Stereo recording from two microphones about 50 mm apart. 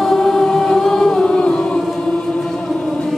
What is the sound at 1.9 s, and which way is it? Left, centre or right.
Chant, centre.